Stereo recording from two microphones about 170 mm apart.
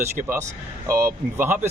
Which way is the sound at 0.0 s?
15° right (ahead or behind).